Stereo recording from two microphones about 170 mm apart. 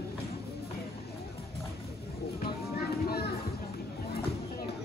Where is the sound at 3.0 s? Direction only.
70° left (ahead or behind).